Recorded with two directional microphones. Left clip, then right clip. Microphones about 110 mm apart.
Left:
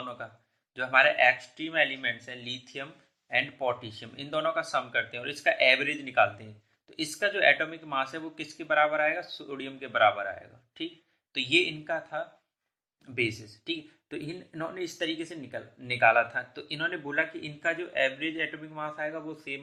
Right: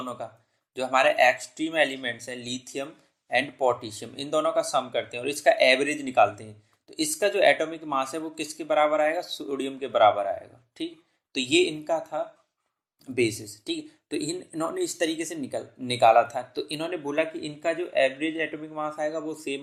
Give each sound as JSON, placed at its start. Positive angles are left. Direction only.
{"t": 0.2, "sound": "speech", "side_deg": -30}